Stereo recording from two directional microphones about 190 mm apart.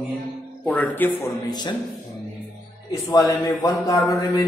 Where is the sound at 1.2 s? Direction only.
25° left (ahead or behind).